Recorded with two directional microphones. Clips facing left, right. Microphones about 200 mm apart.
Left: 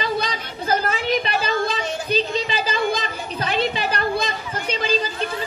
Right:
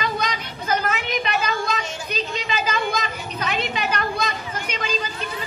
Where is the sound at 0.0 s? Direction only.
30° left (ahead or behind).